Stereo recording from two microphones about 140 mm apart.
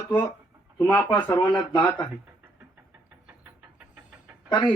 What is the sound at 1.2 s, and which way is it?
Speech, 30° left (ahead or behind).